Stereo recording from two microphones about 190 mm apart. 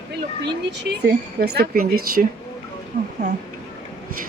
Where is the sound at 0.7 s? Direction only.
60° right (ahead or behind).